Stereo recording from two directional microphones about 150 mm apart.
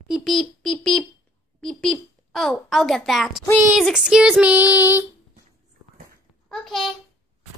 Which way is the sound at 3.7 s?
Centre (ahead or behind).